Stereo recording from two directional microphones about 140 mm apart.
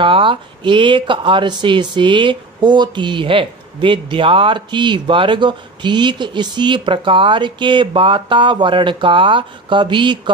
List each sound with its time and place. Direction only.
0.0 s speech: 35° right (ahead or behind)